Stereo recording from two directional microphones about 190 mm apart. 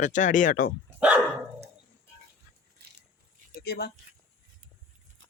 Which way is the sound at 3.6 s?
55° left (ahead or behind).